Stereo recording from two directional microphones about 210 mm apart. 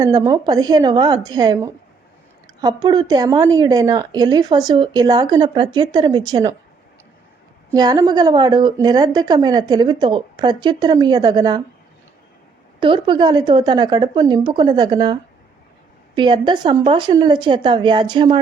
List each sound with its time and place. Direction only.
0.0 s a woman's voice: 15° right (ahead or behind)
7.7 s a woman's voice: 15° right (ahead or behind)
12.8 s a woman's voice: 25° right (ahead or behind)